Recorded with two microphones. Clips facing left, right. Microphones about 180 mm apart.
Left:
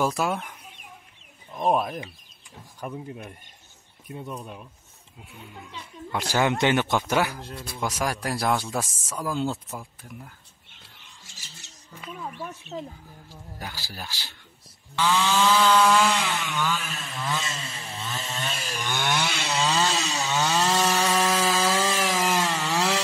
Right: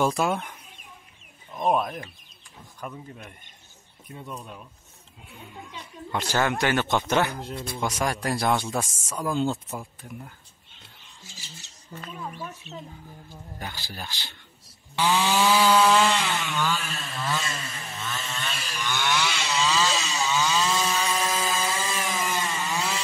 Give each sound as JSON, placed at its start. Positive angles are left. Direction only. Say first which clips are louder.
{"t": 0.0, "sound": "speech", "louder": "right 1 dB", "side_deg": 0}
{"t": 4.1, "sound": "speech", "louder": "left 3 dB", "side_deg": 5}
{"t": 6.6, "sound": "speech", "louder": "left 2 dB", "side_deg": 15}
{"t": 7.3, "sound": "chainsaw", "louder": "right 4 dB", "side_deg": -15}
{"t": 7.8, "sound": "speech", "louder": "even", "side_deg": 0}
{"t": 12.7, "sound": "speech", "louder": "left 5 dB", "side_deg": 50}
{"t": 13.3, "sound": "speech", "louder": "even", "side_deg": 5}
{"t": 15.0, "sound": "chainsaw", "louder": "even", "side_deg": -15}
{"t": 16.8, "sound": "chainsaw", "louder": "right 1 dB", "side_deg": 15}